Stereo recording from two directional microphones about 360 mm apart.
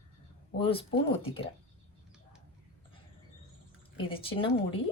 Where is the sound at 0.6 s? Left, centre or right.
Centre.